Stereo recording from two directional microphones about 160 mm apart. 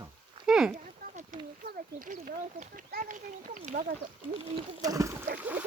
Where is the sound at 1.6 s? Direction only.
60° right (ahead or behind).